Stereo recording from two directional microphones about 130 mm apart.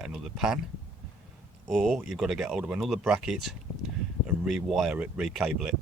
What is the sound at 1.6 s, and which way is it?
Speech, centre (ahead or behind).